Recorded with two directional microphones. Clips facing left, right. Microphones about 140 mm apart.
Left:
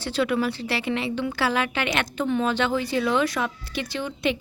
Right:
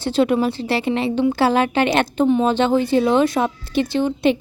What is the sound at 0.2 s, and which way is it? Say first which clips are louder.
A woman's voice: right 6 dB; 25° right (ahead or behind).